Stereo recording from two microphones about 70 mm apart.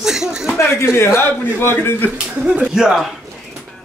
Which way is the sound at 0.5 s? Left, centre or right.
Left.